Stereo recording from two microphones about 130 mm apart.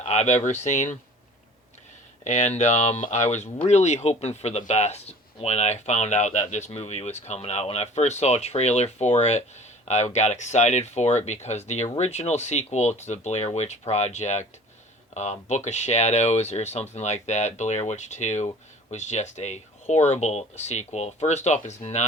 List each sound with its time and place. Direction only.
0.0 s speech: 60° left (ahead or behind)
2.2 s speech: 65° left (ahead or behind)